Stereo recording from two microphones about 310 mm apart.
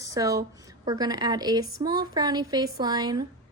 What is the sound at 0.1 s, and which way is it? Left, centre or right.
A woman's voice, centre.